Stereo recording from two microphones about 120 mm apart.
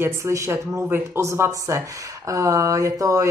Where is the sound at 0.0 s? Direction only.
25° right (ahead or behind).